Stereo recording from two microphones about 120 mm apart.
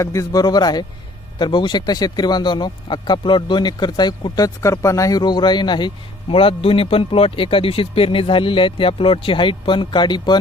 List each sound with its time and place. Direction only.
0.0 s speech: 25° left (ahead or behind)